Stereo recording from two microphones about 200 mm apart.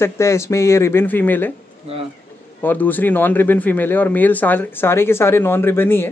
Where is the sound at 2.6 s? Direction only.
10° left (ahead or behind).